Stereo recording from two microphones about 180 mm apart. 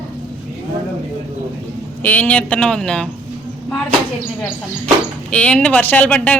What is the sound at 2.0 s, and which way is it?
Speech, 10° left (ahead or behind).